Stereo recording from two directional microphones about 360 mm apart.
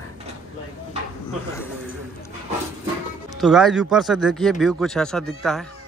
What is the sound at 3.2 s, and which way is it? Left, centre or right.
Speech, centre.